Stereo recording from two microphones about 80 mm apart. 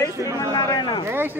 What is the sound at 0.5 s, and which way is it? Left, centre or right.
Speech, left.